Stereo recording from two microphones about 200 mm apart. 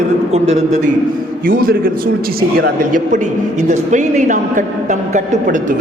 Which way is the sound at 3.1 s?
35° right (ahead or behind).